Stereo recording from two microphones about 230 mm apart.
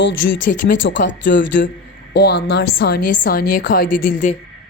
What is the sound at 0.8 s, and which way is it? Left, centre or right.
Speech, left.